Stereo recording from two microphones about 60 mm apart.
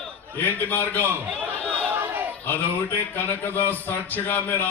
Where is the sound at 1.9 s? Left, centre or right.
Right.